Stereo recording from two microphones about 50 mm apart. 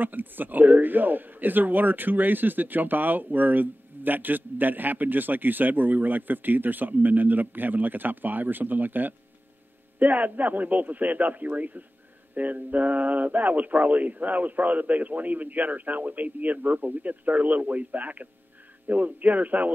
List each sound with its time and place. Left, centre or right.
0.0 s speech: right